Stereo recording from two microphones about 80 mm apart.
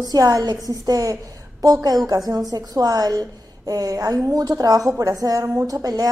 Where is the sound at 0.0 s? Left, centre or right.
Right.